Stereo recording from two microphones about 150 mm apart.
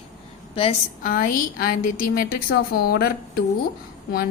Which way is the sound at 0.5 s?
40° left (ahead or behind).